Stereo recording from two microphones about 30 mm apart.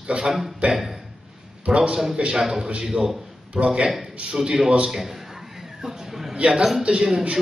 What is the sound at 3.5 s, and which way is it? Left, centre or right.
Speech, right.